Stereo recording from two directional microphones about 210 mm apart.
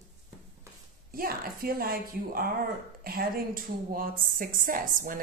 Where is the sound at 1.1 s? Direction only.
45° right (ahead or behind).